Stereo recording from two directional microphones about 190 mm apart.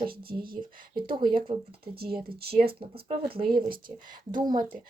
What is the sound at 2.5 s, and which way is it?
Speech, 55° right (ahead or behind).